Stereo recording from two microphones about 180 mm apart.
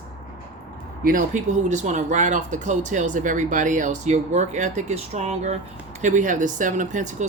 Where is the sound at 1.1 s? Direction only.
45° right (ahead or behind).